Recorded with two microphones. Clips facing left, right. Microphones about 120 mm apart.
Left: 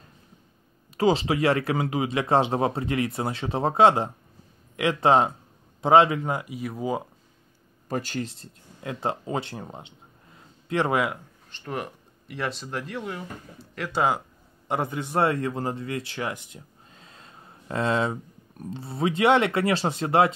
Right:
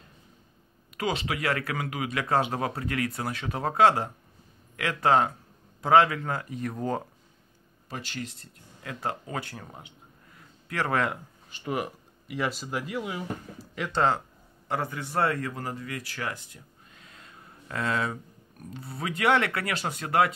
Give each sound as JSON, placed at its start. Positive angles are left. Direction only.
{"t": 0.9, "sound": "speech", "side_deg": 30}
{"t": 7.9, "sound": "speech", "side_deg": 45}
{"t": 8.4, "sound": "speech", "side_deg": 25}
{"t": 11.5, "sound": "speech", "side_deg": -5}
{"t": 14.7, "sound": "speech", "side_deg": 20}